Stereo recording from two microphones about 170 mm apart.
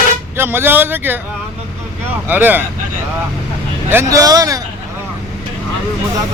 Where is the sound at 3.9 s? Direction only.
20° right (ahead or behind).